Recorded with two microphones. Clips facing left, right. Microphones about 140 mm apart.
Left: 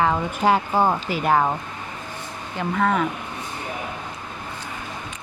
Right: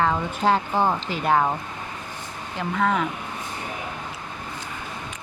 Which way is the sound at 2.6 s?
Centre (ahead or behind).